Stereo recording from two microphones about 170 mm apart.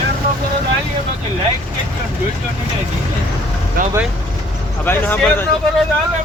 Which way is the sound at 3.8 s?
55° right (ahead or behind).